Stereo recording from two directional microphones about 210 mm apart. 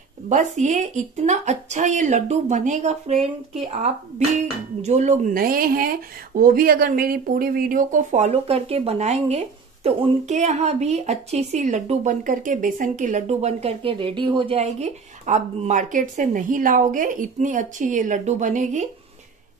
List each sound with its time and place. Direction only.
0.3 s a woman's voice: 35° right (ahead or behind)